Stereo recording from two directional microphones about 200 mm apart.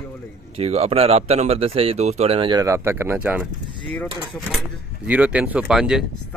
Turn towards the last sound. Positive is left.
turn(degrees=-5)  # may be behind; listen again after turning